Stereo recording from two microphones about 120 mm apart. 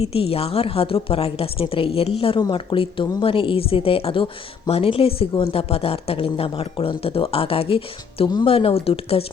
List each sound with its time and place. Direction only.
0.0 s speech: 55° left (ahead or behind)